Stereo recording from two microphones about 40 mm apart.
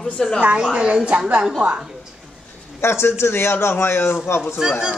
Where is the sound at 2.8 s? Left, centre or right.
Left.